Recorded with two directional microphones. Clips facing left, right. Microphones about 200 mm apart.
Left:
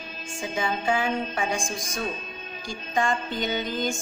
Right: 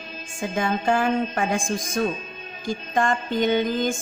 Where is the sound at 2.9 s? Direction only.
50° right (ahead or behind).